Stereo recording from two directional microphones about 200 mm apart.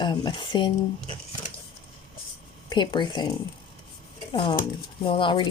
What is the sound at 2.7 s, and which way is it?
Speech, 25° left (ahead or behind).